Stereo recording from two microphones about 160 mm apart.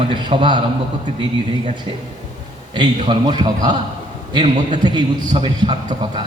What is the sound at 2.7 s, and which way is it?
A man's voice, 30° right (ahead or behind).